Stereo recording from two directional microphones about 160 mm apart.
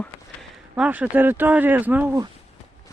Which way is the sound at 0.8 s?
10° right (ahead or behind).